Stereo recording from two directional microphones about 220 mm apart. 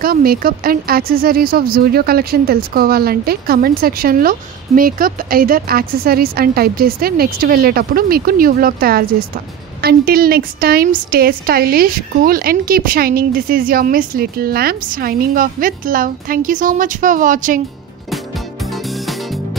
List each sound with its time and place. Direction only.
0.0 s a woman's voice: 40° right (ahead or behind)
18.7 s music: centre (ahead or behind)